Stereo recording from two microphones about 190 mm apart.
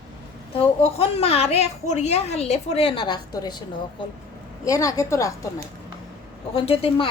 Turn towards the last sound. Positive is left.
turn(degrees=30)  # may be behind; listen again after turning